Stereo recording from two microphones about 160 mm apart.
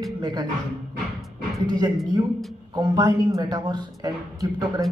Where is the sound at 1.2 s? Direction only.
Centre (ahead or behind).